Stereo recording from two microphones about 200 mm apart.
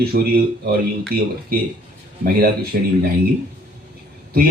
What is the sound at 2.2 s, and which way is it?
Speech, 50° right (ahead or behind).